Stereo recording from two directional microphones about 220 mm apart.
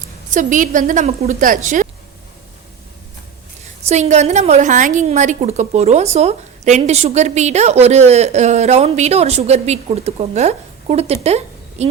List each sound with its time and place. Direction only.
0.3 s a woman's voice: 35° right (ahead or behind)
3.8 s a woman's voice: 30° right (ahead or behind)